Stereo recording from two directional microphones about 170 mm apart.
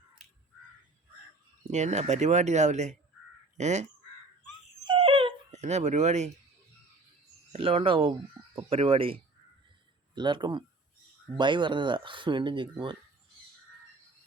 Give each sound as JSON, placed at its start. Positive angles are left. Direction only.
{"t": 1.7, "sound": "speech", "side_deg": -40}
{"t": 4.8, "sound": "dog", "side_deg": -30}
{"t": 7.5, "sound": "speech", "side_deg": -35}
{"t": 10.2, "sound": "speech", "side_deg": -25}